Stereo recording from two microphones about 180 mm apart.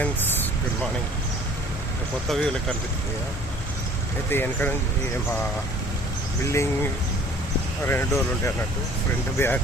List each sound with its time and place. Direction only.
0.0 s a sound: 5° left (ahead or behind)
2.3 s speech: 5° left (ahead or behind)
4.3 s speech: 10° left (ahead or behind)
6.4 s speech: 15° left (ahead or behind)
7.9 s speech: 15° left (ahead or behind)